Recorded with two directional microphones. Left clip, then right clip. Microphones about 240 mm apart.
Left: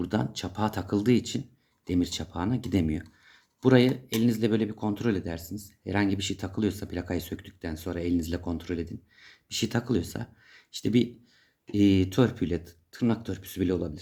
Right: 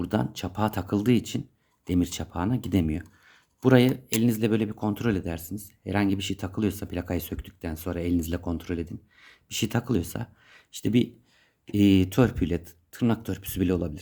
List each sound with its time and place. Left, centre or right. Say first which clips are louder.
0.0 s speech: right 2 dB; right